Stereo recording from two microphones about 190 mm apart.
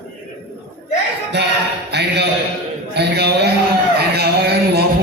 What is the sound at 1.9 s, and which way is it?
A man's voice, 60° right (ahead or behind).